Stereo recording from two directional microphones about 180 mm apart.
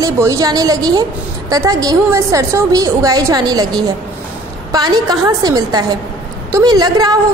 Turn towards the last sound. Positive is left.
turn(degrees=-20)  # may be behind; listen again after turning